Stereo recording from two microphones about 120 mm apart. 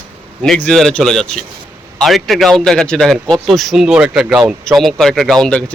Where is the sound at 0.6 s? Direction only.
5° left (ahead or behind).